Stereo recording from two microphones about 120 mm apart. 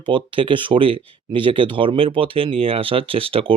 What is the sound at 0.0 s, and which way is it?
Speech, 45° right (ahead or behind).